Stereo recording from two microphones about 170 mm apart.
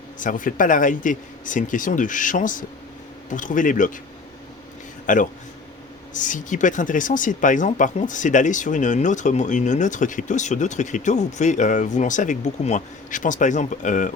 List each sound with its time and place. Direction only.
0.2 s speech: 50° left (ahead or behind)
5.0 s a man's voice: 50° left (ahead or behind)